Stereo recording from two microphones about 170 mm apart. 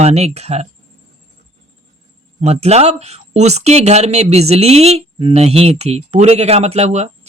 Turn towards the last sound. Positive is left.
turn(degrees=-40)  # may be behind; listen again after turning